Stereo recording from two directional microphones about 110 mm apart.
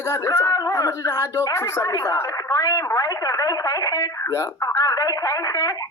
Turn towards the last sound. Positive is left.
turn(degrees=30)  # may be behind; listen again after turning